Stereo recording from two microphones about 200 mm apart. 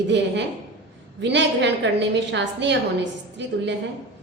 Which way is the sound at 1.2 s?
60° right (ahead or behind).